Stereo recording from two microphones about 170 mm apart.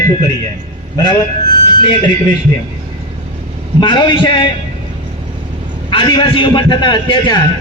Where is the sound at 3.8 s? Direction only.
25° left (ahead or behind).